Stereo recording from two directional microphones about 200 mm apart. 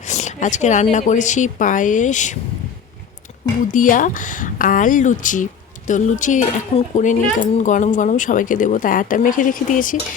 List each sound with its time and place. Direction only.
0.1 s speech: 35° left (ahead or behind)
3.7 s speech: 40° left (ahead or behind)